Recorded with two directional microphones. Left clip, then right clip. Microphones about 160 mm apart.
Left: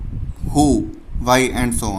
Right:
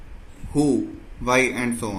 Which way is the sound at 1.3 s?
90° left.